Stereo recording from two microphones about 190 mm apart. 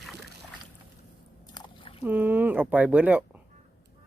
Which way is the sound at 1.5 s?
25° left (ahead or behind).